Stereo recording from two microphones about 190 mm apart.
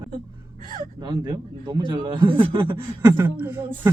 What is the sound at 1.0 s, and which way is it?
Speech, 20° right (ahead or behind).